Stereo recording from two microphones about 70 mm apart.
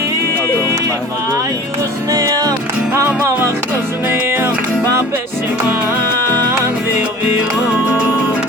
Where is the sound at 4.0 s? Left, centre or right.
Right.